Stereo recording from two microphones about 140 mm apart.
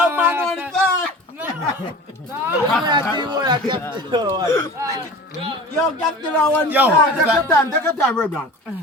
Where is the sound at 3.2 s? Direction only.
30° right (ahead or behind).